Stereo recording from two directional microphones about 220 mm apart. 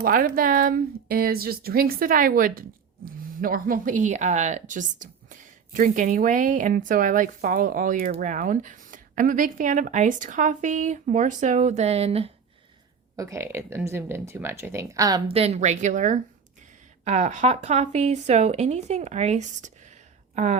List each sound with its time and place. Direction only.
0.0 s a woman's voice: 40° right (ahead or behind)
13.1 s speech: 15° right (ahead or behind)
15.4 s a woman's voice: 30° right (ahead or behind)